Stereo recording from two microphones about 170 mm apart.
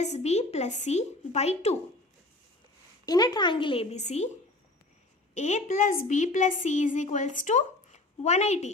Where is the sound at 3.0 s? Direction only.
25° left (ahead or behind).